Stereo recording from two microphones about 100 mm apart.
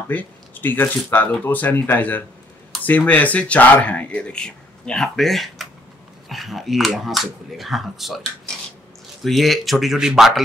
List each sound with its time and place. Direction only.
0.1 s speech: 20° left (ahead or behind); by 8.2 s centre (ahead or behind)
9.2 s speech: centre (ahead or behind)